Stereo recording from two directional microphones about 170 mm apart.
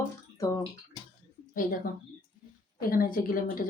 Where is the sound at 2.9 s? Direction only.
60° left (ahead or behind).